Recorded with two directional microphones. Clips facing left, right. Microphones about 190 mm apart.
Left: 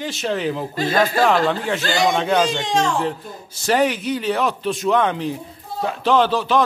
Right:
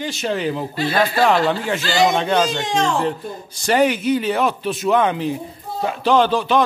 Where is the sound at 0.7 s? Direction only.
45° left (ahead or behind).